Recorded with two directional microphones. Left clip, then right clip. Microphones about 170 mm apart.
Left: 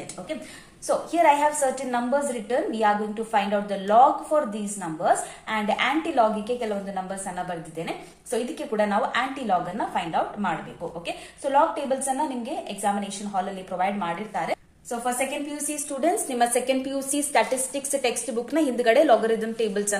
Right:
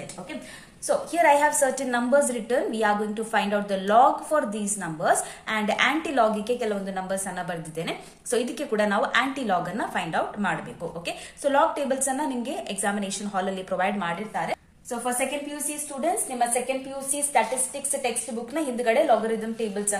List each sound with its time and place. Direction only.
0.8 s a woman's voice: 10° right (ahead or behind)
14.3 s a woman's voice: centre (ahead or behind)
16.0 s a woman's voice: 25° left (ahead or behind)